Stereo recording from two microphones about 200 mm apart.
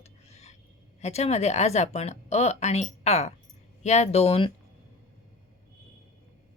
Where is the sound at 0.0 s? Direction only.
30° left (ahead or behind).